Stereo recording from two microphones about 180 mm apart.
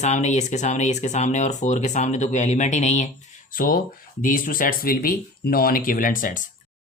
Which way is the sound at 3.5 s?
50° left (ahead or behind).